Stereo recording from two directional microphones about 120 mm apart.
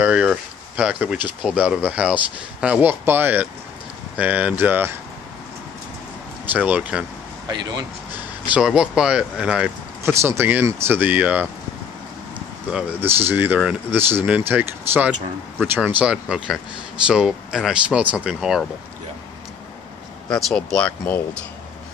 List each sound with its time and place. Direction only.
0.0 s speech: 10° right (ahead or behind)
6.5 s speech: 15° right (ahead or behind)
7.4 s speech: 35° right (ahead or behind)
8.5 s speech: 5° right (ahead or behind)
10.0 s speech: 20° right (ahead or behind); by 18.6 s 5° right (ahead or behind)
20.2 s speech: 5° left (ahead or behind)